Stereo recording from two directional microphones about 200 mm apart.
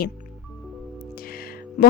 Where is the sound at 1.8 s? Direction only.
40° left (ahead or behind).